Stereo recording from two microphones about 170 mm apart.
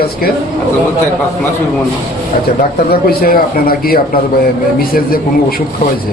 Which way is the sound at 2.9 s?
60° left (ahead or behind).